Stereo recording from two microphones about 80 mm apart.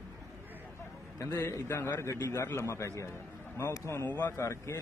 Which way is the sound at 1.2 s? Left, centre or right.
Left.